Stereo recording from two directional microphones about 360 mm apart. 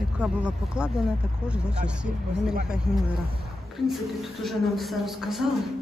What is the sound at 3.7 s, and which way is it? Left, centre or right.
A man's voice, centre.